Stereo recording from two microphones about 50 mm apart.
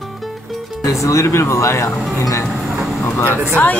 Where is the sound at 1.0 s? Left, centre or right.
Left.